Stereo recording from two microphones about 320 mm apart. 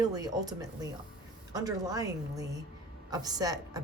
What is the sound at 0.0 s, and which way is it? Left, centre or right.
Speech, centre.